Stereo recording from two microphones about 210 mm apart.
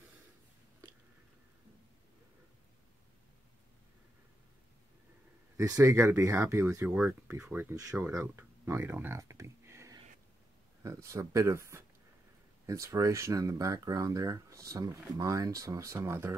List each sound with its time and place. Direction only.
5.6 s speech: 15° right (ahead or behind)